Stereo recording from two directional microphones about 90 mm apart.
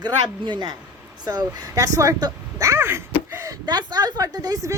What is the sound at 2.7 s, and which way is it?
Speech, 30° right (ahead or behind).